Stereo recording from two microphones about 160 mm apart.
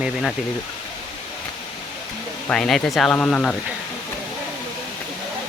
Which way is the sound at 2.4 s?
5° left (ahead or behind).